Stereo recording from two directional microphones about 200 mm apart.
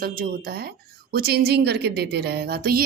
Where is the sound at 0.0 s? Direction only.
50° right (ahead or behind).